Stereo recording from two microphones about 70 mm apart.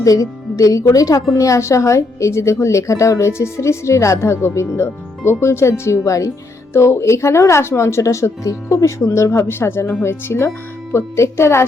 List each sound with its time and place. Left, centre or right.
0.0 s a woman's voice: left